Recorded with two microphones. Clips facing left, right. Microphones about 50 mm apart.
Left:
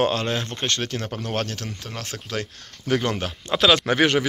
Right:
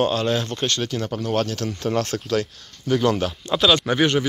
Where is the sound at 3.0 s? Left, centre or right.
Left.